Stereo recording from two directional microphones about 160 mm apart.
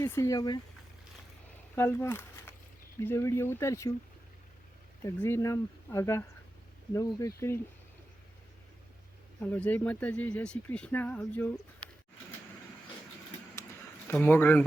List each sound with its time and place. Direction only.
0.0 s speech: 15° left (ahead or behind)
1.7 s speech: 15° left (ahead or behind)
5.0 s speech: 15° left (ahead or behind)
9.4 s speech: 10° left (ahead or behind)
14.1 s speech: 10° left (ahead or behind)